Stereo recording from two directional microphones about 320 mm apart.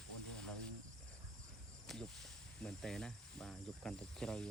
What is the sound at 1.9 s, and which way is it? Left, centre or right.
Speech, centre.